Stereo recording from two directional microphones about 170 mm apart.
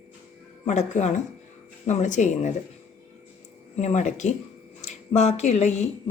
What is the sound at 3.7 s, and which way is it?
Speech, 45° left (ahead or behind).